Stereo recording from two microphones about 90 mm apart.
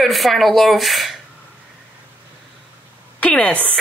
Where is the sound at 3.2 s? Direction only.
15° left (ahead or behind).